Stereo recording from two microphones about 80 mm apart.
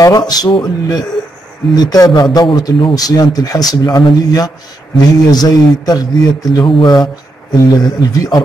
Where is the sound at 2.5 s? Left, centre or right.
Left.